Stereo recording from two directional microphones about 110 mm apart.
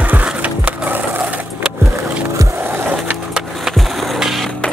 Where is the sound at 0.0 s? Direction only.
15° right (ahead or behind).